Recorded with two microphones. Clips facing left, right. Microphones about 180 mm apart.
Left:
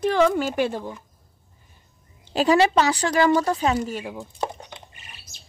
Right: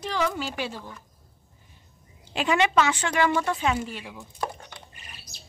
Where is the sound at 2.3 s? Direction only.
35° left (ahead or behind).